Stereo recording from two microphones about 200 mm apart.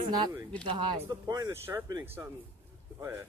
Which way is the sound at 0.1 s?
20° right (ahead or behind).